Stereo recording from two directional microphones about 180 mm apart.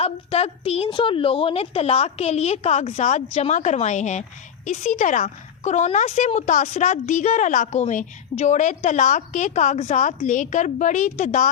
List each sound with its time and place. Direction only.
0.0 s a woman's voice: 35° left (ahead or behind)